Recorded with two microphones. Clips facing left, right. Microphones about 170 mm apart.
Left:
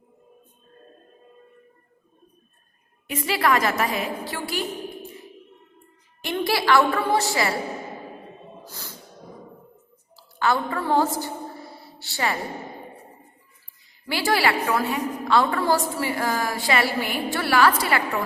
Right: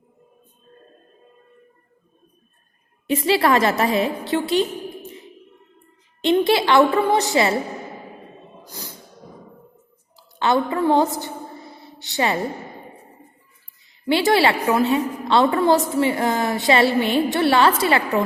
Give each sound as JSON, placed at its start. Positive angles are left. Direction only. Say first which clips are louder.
{"t": 3.1, "sound": "a woman's voice", "louder": "right 5 dB", "side_deg": -30}
{"t": 6.2, "sound": "a woman's voice", "louder": "right 6 dB", "side_deg": -20}
{"t": 8.6, "sound": "music", "louder": "right 3 dB", "side_deg": -15}
{"t": 10.2, "sound": "a sound", "louder": "right 4 dB", "side_deg": -20}
{"t": 14.1, "sound": "a woman's voice", "louder": "right 5 dB", "side_deg": -20}